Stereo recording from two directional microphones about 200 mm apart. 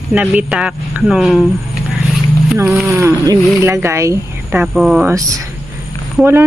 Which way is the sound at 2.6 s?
10° right (ahead or behind).